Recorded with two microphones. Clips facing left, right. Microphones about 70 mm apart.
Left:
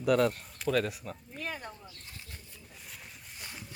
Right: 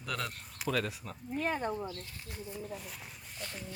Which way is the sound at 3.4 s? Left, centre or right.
Centre.